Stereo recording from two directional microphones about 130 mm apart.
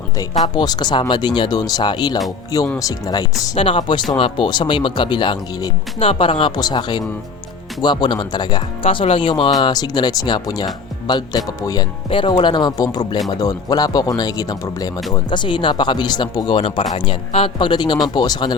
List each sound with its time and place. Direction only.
0.4 s speech: 35° left (ahead or behind)
3.6 s speech: 45° left (ahead or behind)
6.0 s speech: 45° left (ahead or behind)
8.8 s speech: 45° left (ahead or behind); by 11.9 s 30° left (ahead or behind)
12.0 s speech: 40° left (ahead or behind)
15.3 s speech: 40° left (ahead or behind)